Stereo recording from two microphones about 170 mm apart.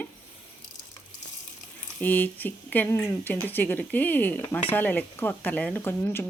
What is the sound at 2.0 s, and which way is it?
A woman's voice, 10° left (ahead or behind).